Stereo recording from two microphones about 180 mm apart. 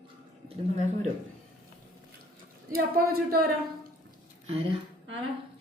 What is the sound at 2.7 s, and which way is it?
Speech, 55° right (ahead or behind).